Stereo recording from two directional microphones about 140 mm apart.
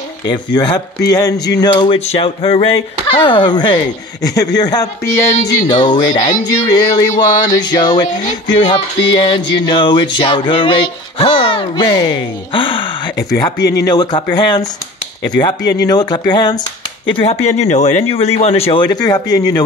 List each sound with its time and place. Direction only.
0.3 s music: 30° left (ahead or behind)
2.0 s music: 45° left (ahead or behind)
4.2 s speech: 25° left (ahead or behind)
5.5 s music: 30° left (ahead or behind)
13.4 s speech: 30° left (ahead or behind)
15.3 s music: 30° left (ahead or behind)
17.2 s speech: 50° left (ahead or behind); by 19.6 s 25° left (ahead or behind)